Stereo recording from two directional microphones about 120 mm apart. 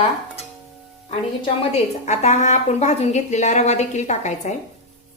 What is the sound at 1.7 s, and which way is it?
A woman's voice, 80° left.